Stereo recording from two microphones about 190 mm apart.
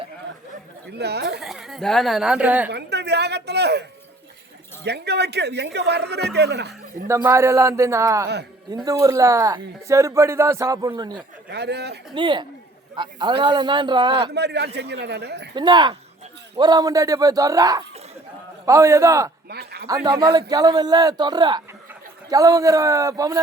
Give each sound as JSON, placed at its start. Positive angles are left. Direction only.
{"t": 0.9, "sound": "speech", "side_deg": -60}
{"t": 1.4, "sound": "speech", "side_deg": 0}
{"t": 2.6, "sound": "a sound", "side_deg": -60}
{"t": 4.8, "sound": "speech", "side_deg": -60}
{"t": 7.1, "sound": "speech", "side_deg": -15}
{"t": 11.5, "sound": "speech", "side_deg": -60}
{"t": 12.1, "sound": "a man's voice", "side_deg": -25}
{"t": 14.3, "sound": "speech", "side_deg": -60}
{"t": 15.5, "sound": "a man's voice", "side_deg": -25}
{"t": 19.5, "sound": "speech", "side_deg": -55}
{"t": 20.1, "sound": "a man's voice", "side_deg": -20}